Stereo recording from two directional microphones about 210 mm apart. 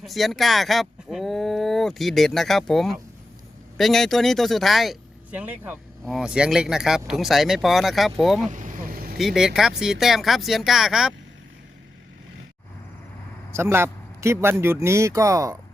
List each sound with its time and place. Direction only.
0.0 s speech: centre (ahead or behind)
8.4 s vehicle: 40° right (ahead or behind)
9.1 s speech: centre (ahead or behind)
13.5 s speech: 10° right (ahead or behind)